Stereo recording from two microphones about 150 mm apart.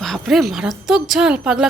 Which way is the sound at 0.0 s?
Centre (ahead or behind).